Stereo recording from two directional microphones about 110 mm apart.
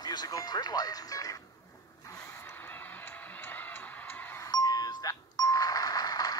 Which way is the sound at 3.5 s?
15° left (ahead or behind).